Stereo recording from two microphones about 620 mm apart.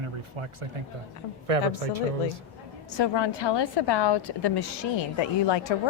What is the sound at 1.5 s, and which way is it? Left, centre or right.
Speech, right.